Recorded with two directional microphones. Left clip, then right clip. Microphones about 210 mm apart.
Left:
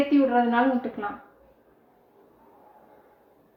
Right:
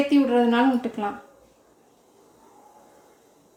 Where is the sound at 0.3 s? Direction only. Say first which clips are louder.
Right 2 dB; 45° right (ahead or behind).